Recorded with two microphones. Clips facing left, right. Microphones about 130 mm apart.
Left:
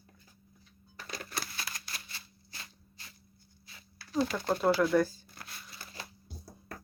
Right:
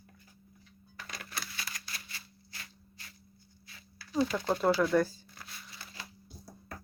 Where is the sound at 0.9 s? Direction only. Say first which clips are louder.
Left 3 dB; 35° left (ahead or behind).